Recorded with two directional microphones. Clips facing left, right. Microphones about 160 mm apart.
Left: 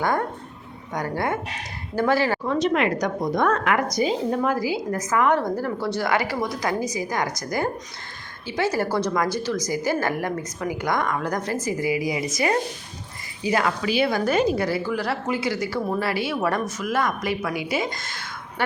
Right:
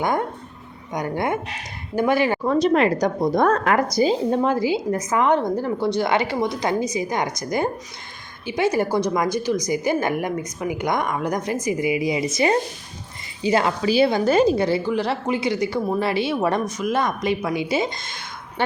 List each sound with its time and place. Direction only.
0.0 s a woman's voice: 20° right (ahead or behind)
2.4 s a woman's voice: 35° right (ahead or behind); by 18.6 s 20° right (ahead or behind)